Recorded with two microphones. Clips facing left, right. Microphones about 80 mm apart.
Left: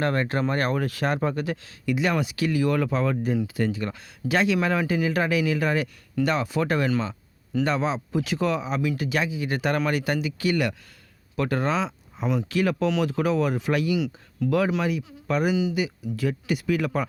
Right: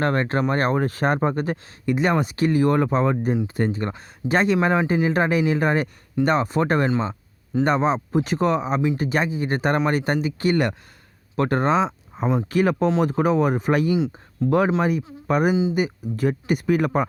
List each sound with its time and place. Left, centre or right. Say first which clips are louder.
0.0 s speech: right 3 dB; right